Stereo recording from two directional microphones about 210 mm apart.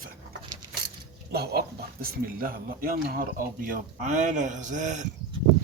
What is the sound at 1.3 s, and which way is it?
Speech, 50° right (ahead or behind).